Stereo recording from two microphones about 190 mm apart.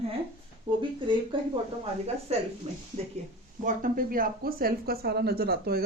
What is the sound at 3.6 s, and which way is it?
Speech, 45° right (ahead or behind).